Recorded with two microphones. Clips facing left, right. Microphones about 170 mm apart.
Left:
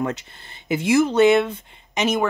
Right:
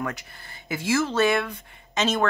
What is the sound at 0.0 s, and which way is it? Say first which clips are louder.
Speech: left 6 dB; 25° left (ahead or behind).